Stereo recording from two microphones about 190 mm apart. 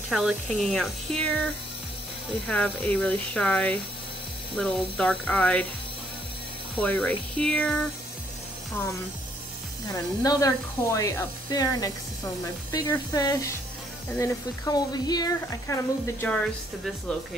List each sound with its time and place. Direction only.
0.1 s speech: centre (ahead or behind)
6.8 s speech: 5° left (ahead or behind)
10.2 s speech: 15° left (ahead or behind)